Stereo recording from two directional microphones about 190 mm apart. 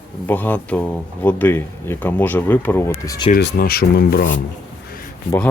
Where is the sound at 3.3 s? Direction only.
55° left (ahead or behind).